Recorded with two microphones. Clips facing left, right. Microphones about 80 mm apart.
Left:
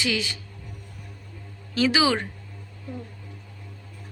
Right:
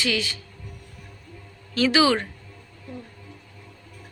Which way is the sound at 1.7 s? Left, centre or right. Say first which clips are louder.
Right 2 dB; centre.